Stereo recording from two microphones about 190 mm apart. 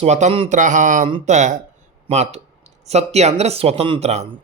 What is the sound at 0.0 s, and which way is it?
Speech, 35° right (ahead or behind).